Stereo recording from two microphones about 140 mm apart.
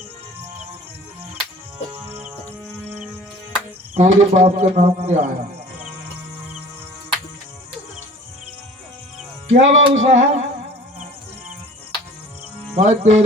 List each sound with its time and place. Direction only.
2.0 s music: 15° right (ahead or behind)
3.9 s a man's voice: 50° right (ahead or behind)
9.5 s a man's voice: 55° right (ahead or behind)
12.7 s a man's voice: 50° right (ahead or behind)